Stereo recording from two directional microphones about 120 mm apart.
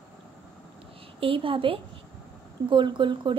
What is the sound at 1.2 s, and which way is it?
A woman's voice, 50° right (ahead or behind).